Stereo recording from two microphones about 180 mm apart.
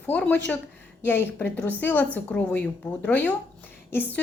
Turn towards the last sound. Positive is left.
turn(degrees=10)  # may be behind; listen again after turning